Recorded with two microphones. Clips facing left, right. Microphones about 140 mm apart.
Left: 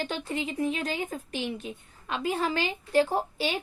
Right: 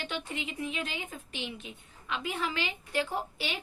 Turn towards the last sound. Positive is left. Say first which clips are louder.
# left 6 dB
turn(degrees=35)  # may be behind; listen again after turning